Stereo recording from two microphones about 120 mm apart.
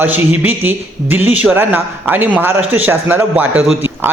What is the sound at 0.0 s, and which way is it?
A man's voice, 15° right (ahead or behind).